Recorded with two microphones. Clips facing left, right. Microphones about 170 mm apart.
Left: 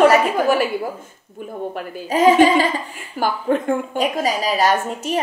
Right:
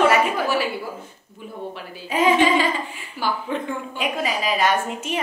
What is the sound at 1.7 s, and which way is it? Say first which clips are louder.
A woman's voice: left 4 dB; 45° left (ahead or behind).